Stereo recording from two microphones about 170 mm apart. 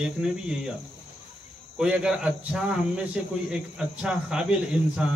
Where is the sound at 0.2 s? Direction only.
5° right (ahead or behind).